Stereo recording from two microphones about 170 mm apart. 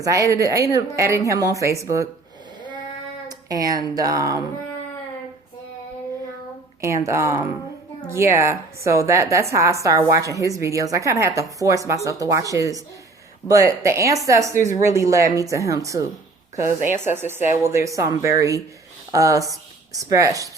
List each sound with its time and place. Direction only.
0.0 s a woman's voice: 20° right (ahead or behind)
3.2 s speech: 20° right (ahead or behind)
6.8 s a woman's voice: 15° right (ahead or behind)